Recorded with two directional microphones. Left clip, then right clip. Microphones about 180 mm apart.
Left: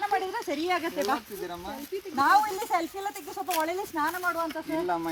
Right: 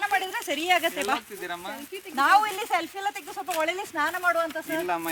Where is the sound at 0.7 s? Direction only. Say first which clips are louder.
Right 5 dB; 20° right (ahead or behind).